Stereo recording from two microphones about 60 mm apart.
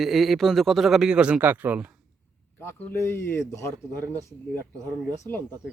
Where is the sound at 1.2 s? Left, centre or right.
Centre.